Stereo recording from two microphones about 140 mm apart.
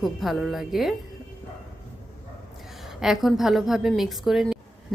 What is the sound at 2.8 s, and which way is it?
A woman's voice, centre (ahead or behind).